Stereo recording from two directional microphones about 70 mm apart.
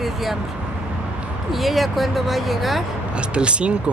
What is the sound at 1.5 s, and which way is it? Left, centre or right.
Speech, centre.